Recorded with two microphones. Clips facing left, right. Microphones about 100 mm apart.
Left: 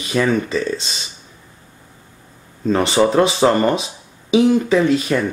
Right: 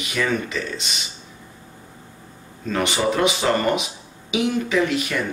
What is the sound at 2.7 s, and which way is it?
Speech, 35° left (ahead or behind).